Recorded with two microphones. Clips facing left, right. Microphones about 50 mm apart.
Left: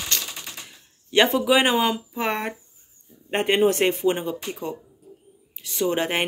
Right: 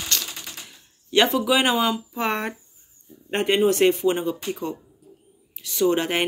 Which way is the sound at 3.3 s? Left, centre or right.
Centre.